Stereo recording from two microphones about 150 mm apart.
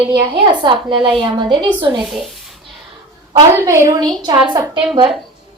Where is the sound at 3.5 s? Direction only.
15° right (ahead or behind).